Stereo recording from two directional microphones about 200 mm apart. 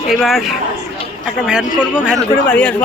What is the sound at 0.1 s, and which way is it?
Speech, centre (ahead or behind).